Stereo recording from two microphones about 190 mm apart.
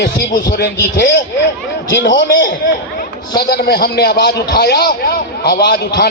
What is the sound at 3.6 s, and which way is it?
A man's voice, 50° left (ahead or behind).